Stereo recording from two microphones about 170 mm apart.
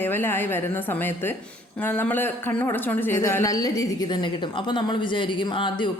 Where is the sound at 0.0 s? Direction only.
10° left (ahead or behind).